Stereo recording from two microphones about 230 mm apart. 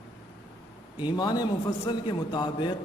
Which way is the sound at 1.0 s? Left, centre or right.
Centre.